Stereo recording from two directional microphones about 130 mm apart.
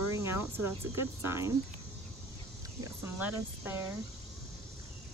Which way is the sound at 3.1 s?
15° right (ahead or behind).